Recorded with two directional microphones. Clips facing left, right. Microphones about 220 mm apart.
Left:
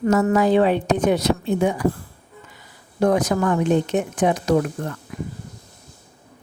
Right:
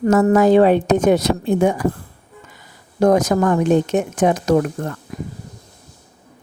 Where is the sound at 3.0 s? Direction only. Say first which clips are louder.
Right 4 dB; 45° right (ahead or behind).